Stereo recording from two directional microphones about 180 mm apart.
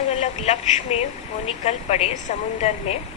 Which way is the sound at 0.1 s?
40° left (ahead or behind).